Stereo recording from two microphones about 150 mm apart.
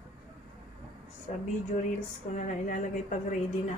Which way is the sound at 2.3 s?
55° left (ahead or behind).